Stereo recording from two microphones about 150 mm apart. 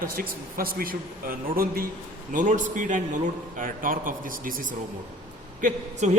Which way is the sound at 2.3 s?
55° right (ahead or behind).